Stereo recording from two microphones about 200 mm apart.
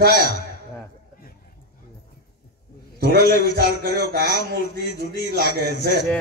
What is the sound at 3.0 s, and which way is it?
A man's voice, 50° right (ahead or behind).